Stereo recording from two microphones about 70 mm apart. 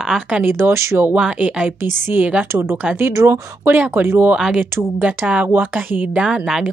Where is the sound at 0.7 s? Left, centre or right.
Right.